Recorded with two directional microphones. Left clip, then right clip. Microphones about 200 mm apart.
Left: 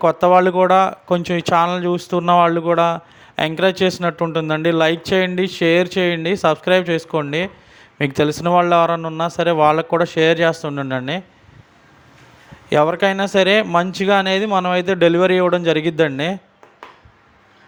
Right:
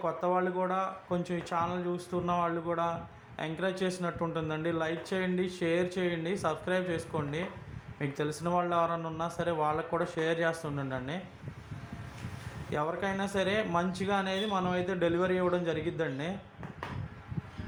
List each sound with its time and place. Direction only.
0.0 s speech: 45° left (ahead or behind)
12.7 s speech: 45° left (ahead or behind)